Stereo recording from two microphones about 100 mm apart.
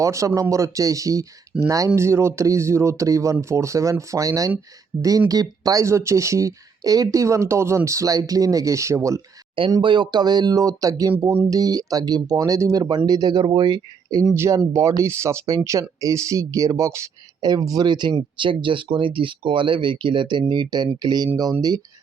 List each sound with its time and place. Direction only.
0.0 s speech: 30° right (ahead or behind)
9.8 s speech: 50° right (ahead or behind)
14.3 s speech: 25° right (ahead or behind)
17.4 s speech: 40° right (ahead or behind)